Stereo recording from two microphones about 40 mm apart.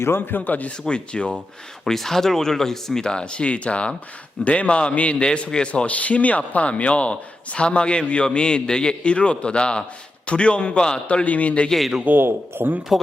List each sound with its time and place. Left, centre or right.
0.0 s a man's voice: left
0.9 s a man's voice: left
1.8 s a man's voice: centre; by 5.1 s left
5.2 s a man's voice: centre
5.8 s a man's voice: left
11.1 s a man's voice: left
12.2 s speech: right